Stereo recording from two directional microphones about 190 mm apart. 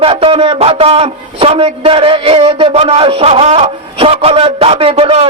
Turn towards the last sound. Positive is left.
turn(degrees=-30)  # may be behind; listen again after turning